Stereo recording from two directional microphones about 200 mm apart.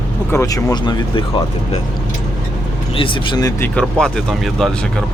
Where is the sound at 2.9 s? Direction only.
25° left (ahead or behind).